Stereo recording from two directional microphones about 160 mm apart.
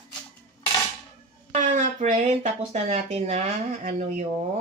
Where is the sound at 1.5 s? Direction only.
50° right (ahead or behind).